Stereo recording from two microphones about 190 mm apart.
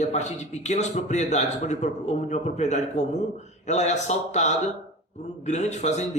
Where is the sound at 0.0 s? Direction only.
40° left (ahead or behind).